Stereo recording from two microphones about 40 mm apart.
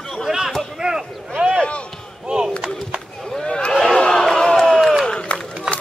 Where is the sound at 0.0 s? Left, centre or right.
Centre.